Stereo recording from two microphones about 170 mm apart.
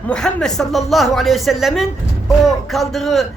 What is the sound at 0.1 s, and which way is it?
A man's voice, 5° left (ahead or behind).